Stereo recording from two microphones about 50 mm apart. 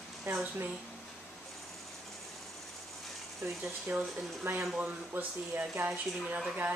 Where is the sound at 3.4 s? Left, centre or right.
Right.